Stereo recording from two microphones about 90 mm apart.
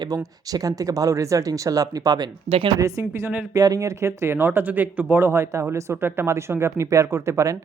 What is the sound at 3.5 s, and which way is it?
Speech, 40° right (ahead or behind).